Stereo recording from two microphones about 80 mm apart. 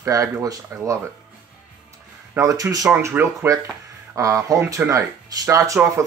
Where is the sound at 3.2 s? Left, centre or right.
Centre.